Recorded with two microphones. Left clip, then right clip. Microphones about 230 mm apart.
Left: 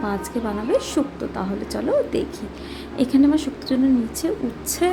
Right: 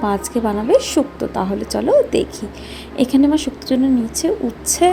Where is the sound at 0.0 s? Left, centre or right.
Centre.